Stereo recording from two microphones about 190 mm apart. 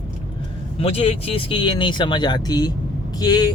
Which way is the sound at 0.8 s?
30° left (ahead or behind).